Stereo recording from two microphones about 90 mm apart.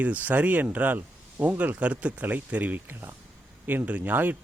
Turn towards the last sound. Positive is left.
turn(degrees=-20)  # may be behind; listen again after turning